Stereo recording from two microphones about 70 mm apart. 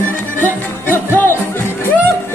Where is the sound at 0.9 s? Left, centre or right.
Left.